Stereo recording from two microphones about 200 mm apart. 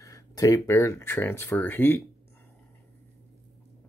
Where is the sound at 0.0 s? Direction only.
15° left (ahead or behind).